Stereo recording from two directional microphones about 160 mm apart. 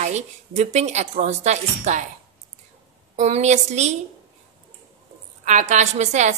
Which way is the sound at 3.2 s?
45° right (ahead or behind).